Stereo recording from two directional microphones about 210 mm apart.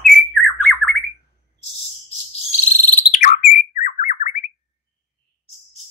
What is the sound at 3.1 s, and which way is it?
Bird, 35° left (ahead or behind).